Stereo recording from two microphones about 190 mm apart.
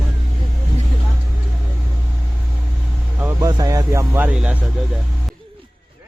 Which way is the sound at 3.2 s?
20° right (ahead or behind).